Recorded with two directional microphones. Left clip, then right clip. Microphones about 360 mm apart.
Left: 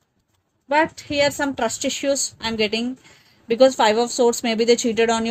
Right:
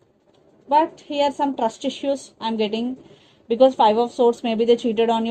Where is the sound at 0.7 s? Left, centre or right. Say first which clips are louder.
Right 1 dB; left.